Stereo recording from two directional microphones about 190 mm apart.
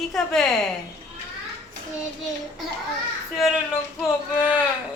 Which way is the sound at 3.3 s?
Centre (ahead or behind).